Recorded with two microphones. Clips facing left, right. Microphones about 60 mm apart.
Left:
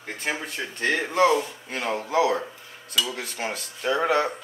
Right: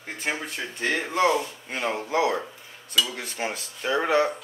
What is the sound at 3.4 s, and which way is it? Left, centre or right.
Speech, centre.